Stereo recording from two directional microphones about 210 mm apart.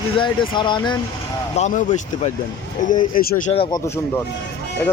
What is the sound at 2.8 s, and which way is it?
Speech, 40° left (ahead or behind).